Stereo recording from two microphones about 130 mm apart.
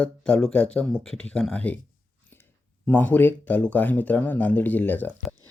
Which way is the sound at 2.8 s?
15° left (ahead or behind).